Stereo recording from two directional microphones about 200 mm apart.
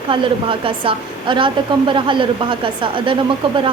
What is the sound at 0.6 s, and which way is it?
Speech, 25° right (ahead or behind).